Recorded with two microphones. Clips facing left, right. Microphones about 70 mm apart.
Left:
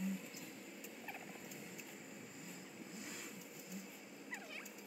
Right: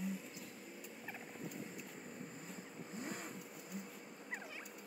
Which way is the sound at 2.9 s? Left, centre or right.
Right.